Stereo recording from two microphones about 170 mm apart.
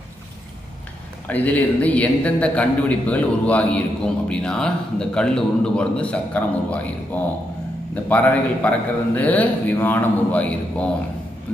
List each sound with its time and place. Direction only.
1.2 s a man's voice: 10° left (ahead or behind)